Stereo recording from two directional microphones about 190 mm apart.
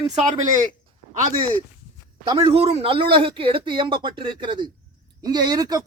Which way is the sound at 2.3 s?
30° right (ahead or behind).